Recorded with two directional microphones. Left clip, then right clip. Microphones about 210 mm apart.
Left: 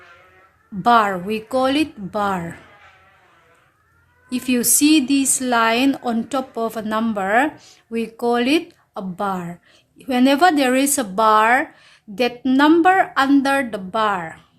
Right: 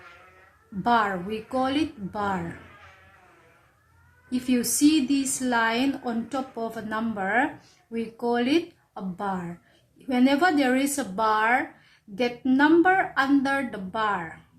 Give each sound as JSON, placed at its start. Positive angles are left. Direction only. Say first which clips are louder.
{"t": 0.8, "sound": "speech", "louder": "left 8 dB", "side_deg": 45}
{"t": 4.3, "sound": "speech", "louder": "left 6 dB", "side_deg": 45}